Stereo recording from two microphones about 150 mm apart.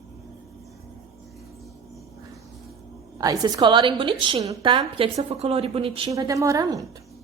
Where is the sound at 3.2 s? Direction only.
25° right (ahead or behind).